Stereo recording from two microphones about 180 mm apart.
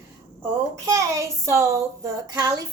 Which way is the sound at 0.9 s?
15° right (ahead or behind).